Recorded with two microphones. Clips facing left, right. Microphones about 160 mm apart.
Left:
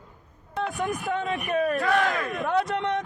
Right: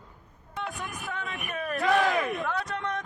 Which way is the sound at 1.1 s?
35° left (ahead or behind).